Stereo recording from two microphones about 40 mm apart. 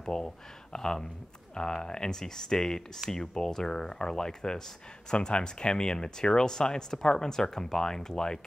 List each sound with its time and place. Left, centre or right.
0.0 s speech: centre